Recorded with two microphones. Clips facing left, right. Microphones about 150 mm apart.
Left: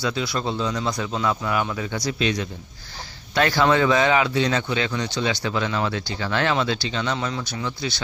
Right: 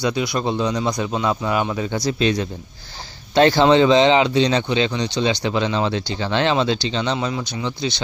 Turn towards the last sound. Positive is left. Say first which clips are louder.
# right 4 dB
turn(degrees=-20)  # may be behind; listen again after turning